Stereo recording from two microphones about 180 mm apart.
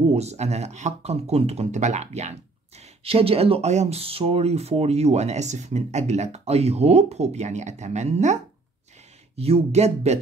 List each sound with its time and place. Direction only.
0.1 s speech: 35° right (ahead or behind)
9.4 s speech: 35° right (ahead or behind)